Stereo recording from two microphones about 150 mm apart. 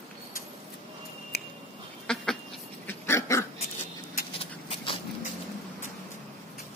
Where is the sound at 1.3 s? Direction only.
90° left.